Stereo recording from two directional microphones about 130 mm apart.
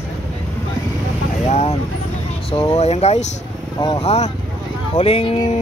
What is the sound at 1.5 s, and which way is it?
Speech, 55° left (ahead or behind).